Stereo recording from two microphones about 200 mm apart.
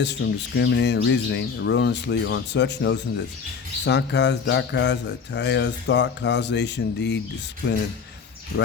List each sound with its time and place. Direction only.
0.0 s speech: 60° left (ahead or behind)